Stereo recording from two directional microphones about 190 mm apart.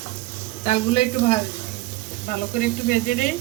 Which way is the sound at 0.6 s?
35° left (ahead or behind).